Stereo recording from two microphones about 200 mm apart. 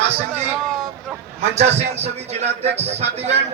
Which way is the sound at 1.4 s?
35° right (ahead or behind).